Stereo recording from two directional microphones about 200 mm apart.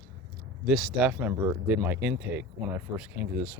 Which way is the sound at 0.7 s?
Centre (ahead or behind).